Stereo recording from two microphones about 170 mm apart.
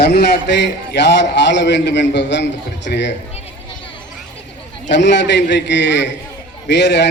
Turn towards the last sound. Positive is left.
turn(degrees=90)